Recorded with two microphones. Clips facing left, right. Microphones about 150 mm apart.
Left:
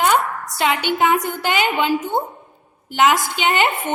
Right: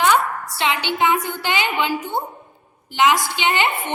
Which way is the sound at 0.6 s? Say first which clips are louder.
Left 2 dB; 45° left (ahead or behind).